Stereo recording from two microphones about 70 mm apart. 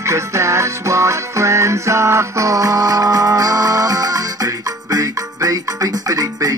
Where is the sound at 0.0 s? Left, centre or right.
Right.